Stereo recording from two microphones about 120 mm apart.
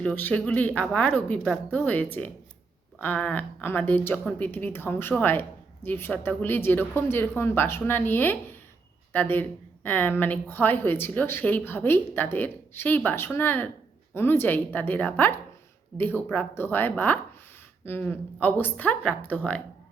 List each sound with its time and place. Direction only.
0.0 s a woman's voice: 15° left (ahead or behind)